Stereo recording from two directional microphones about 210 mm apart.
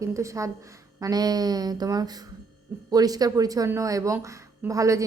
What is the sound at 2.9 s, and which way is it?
A woman's voice, 20° right (ahead or behind).